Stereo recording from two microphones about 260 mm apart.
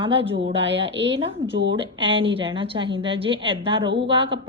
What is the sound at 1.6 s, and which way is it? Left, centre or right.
A woman's voice, centre.